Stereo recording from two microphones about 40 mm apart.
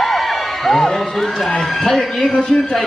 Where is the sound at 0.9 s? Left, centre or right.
Centre.